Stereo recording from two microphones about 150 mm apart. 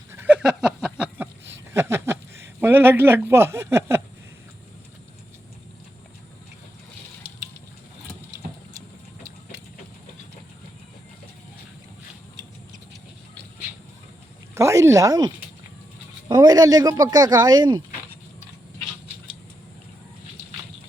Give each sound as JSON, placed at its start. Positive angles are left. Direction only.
{"t": 0.1, "sound": "a sound", "side_deg": -10}
{"t": 2.6, "sound": "speech", "side_deg": -15}
{"t": 14.5, "sound": "speech", "side_deg": -20}
{"t": 16.3, "sound": "speech", "side_deg": -25}